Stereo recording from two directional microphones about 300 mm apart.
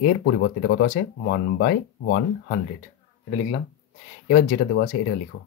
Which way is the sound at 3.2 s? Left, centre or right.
Centre.